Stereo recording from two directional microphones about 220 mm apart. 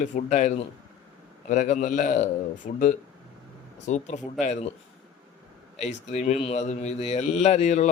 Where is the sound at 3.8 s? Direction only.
30° left (ahead or behind).